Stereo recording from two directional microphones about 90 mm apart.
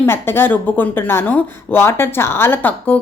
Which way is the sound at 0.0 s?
25° left (ahead or behind).